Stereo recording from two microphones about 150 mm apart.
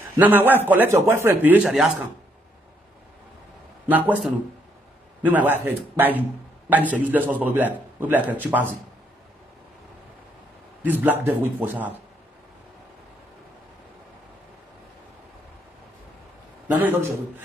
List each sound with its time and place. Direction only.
0.2 s a man's voice: 10° right (ahead or behind)
1.6 s a man's voice: 5° right (ahead or behind)
3.8 s a man's voice: 10° right (ahead or behind)
10.8 s a man's voice: 10° right (ahead or behind)
16.6 s a man's voice: 10° right (ahead or behind)